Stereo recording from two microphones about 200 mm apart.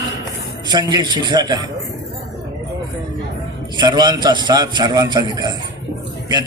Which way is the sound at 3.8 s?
20° right (ahead or behind).